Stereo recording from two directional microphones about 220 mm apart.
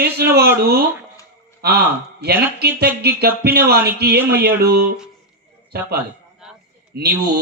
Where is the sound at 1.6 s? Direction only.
45° right (ahead or behind).